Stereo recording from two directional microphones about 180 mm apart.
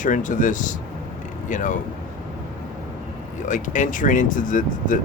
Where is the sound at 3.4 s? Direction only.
45° left (ahead or behind).